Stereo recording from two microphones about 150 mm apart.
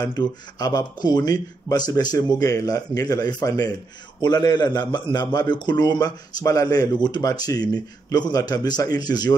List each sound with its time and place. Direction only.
0.0 s a man's voice: 25° left (ahead or behind)